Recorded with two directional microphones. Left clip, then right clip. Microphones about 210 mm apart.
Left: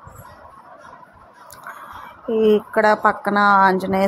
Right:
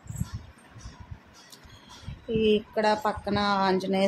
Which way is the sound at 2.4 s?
20° left (ahead or behind).